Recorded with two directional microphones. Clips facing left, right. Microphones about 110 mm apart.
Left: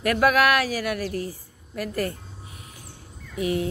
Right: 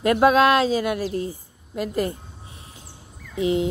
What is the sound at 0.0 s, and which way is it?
Speech, 25° right (ahead or behind).